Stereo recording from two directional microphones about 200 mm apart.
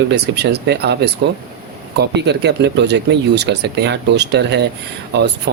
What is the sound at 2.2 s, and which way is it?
Speech, 60° right (ahead or behind).